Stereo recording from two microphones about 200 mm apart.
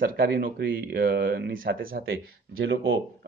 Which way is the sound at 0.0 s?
50° right (ahead or behind).